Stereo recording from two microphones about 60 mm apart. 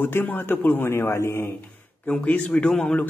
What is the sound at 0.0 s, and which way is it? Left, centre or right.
Speech, left.